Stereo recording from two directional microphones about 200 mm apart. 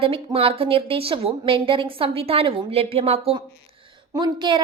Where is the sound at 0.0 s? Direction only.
30° right (ahead or behind).